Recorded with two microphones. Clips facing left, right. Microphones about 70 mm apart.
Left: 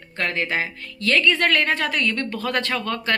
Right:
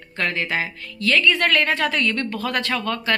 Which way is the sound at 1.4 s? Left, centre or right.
Left.